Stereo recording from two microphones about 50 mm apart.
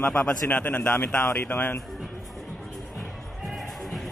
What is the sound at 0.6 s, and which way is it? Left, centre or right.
Speech, left.